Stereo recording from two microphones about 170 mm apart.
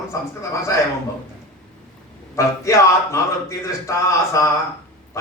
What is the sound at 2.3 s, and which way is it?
Speech, 20° left (ahead or behind).